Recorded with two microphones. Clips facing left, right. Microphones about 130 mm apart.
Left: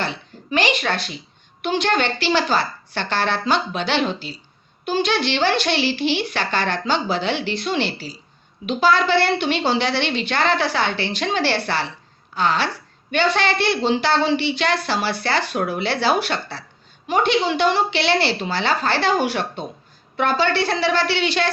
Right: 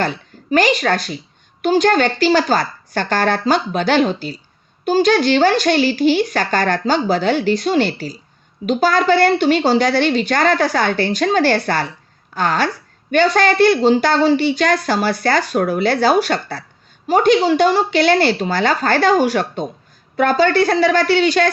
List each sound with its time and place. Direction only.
0.0 s a woman's voice: 45° right (ahead or behind)